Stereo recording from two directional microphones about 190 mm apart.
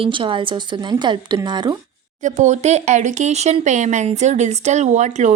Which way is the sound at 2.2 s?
40° right (ahead or behind).